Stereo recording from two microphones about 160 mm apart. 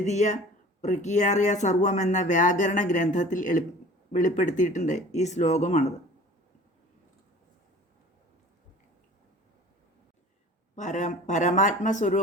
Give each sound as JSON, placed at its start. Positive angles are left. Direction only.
{"t": 0.0, "sound": "speech", "side_deg": 45}
{"t": 10.8, "sound": "speech", "side_deg": 50}